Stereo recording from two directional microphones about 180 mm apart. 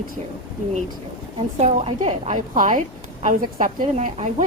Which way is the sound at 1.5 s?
40° right (ahead or behind).